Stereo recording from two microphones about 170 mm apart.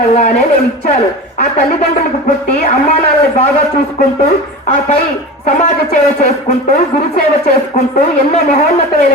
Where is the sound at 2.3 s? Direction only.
45° left (ahead or behind).